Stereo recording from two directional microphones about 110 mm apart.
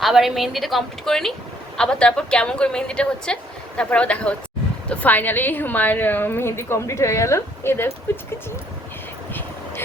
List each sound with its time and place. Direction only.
0.0 s a woman's voice: centre (ahead or behind); by 8.2 s 20° left (ahead or behind)